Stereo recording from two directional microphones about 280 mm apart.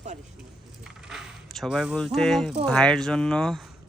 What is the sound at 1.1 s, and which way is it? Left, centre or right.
Speech, centre.